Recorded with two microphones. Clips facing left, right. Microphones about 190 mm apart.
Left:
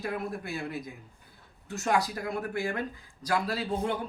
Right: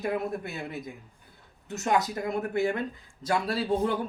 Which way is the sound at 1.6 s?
20° right (ahead or behind).